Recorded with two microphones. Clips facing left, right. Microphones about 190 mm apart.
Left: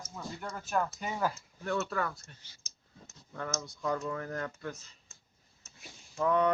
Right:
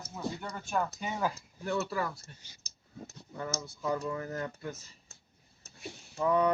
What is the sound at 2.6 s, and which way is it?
Clicking, 35° right (ahead or behind).